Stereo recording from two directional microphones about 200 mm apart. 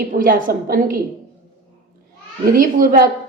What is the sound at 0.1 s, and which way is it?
Speech, 45° right (ahead or behind).